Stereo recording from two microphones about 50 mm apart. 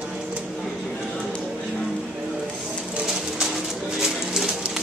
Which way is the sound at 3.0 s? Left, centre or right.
Centre.